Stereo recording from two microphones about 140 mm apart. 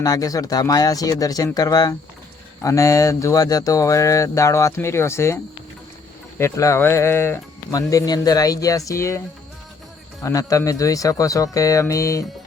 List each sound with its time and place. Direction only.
0.0 s speech: 25° left (ahead or behind)
6.4 s speech: 20° left (ahead or behind)
10.2 s speech: 25° left (ahead or behind)